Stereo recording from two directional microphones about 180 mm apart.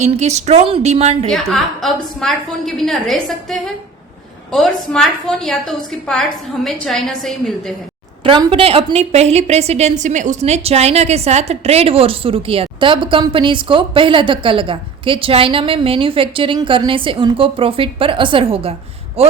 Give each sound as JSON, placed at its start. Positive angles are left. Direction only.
{"t": 0.0, "sound": "speech", "side_deg": -40}
{"t": 1.3, "sound": "a woman's voice", "side_deg": 0}
{"t": 8.2, "sound": "a woman's voice", "side_deg": -30}